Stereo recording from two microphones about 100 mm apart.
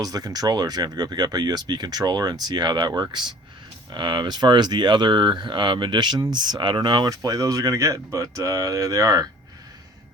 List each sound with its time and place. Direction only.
0.0 s speech: 40° right (ahead or behind)